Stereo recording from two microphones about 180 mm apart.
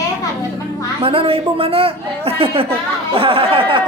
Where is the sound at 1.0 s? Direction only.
30° right (ahead or behind).